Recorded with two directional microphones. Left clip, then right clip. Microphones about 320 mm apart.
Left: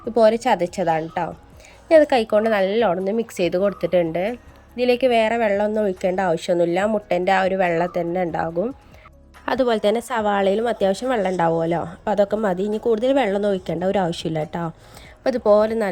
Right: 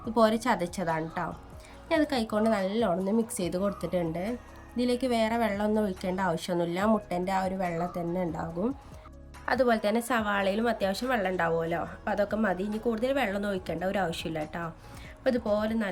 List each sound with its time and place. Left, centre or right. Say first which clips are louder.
0.1 s a woman's voice: left 9 dB; centre
9.5 s a woman's voice: left 7 dB; left